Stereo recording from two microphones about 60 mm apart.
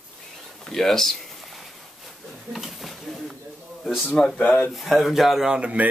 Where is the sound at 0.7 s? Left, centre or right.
Centre.